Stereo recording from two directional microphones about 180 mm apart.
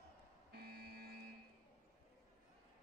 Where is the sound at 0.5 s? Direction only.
60° right (ahead or behind).